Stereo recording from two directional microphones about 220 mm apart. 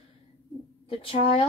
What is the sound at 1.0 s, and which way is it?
Speech, 25° left (ahead or behind).